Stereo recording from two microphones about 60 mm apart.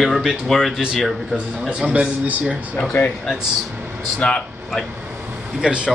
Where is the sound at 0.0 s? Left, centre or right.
Centre.